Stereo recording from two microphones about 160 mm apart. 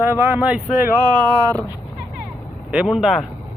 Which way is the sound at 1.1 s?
25° right (ahead or behind).